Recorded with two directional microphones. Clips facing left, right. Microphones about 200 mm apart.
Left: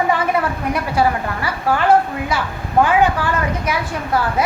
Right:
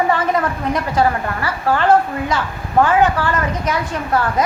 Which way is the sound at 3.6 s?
10° left (ahead or behind).